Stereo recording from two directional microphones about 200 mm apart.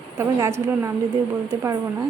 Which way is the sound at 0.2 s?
15° right (ahead or behind).